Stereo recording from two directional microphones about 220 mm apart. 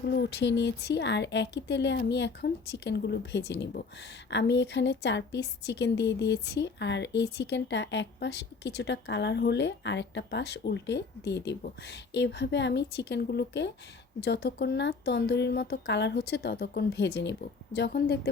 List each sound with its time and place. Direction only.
0.1 s a woman's voice: 50° left (ahead or behind)